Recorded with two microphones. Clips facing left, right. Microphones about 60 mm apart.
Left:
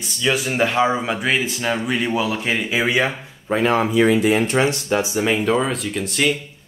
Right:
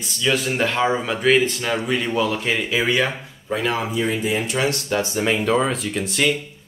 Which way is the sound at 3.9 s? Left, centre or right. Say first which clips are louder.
Left 6 dB; left.